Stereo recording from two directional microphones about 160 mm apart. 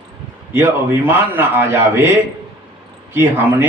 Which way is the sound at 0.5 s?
15° right (ahead or behind).